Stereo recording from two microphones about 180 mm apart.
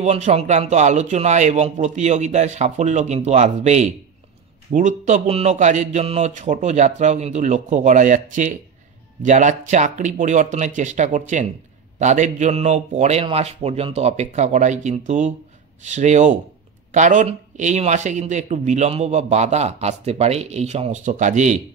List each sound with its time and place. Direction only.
0.0 s speech: 40° right (ahead or behind)